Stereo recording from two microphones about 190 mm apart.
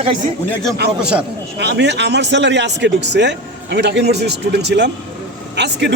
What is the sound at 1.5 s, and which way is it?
Speech, 60° right (ahead or behind).